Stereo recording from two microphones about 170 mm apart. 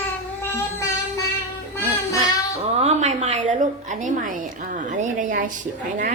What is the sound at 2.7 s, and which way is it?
Speech, 40° right (ahead or behind).